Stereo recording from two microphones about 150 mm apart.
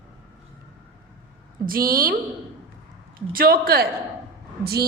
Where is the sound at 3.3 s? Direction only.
75° right (ahead or behind).